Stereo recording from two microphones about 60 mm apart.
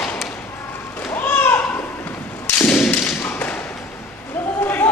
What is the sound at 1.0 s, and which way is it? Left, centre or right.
Whip, left.